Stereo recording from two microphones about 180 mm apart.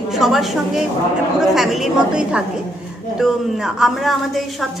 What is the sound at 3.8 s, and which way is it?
Speech, centre (ahead or behind).